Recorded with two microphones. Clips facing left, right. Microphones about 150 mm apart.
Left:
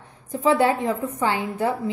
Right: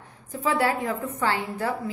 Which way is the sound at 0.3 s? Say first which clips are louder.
Left 5 dB; 30° left (ahead or behind).